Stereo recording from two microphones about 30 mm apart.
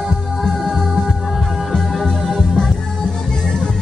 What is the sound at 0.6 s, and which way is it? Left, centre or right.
Music, centre.